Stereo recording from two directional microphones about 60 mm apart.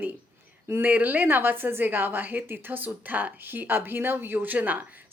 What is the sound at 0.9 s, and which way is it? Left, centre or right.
Speech, right.